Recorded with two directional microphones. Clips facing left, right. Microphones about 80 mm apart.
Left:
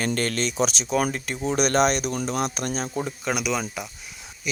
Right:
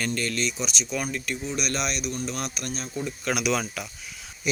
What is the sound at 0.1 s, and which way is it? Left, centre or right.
Speech, left.